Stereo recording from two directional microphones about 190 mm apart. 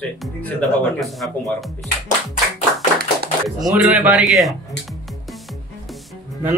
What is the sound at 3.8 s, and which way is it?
Speech, 5° right (ahead or behind).